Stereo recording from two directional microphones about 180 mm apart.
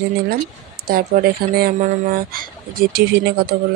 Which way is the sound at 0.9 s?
55° right (ahead or behind).